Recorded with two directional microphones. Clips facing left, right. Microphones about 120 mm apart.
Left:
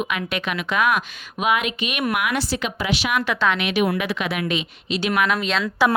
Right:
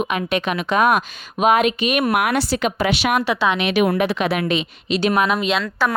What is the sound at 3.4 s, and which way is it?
Speech, 25° right (ahead or behind).